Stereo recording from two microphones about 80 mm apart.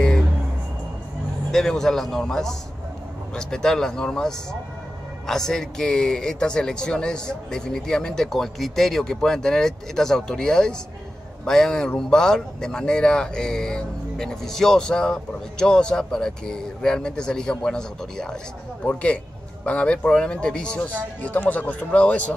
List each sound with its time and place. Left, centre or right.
1.5 s a man's voice: centre